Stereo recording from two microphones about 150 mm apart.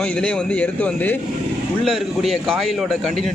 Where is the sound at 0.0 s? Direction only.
10° left (ahead or behind).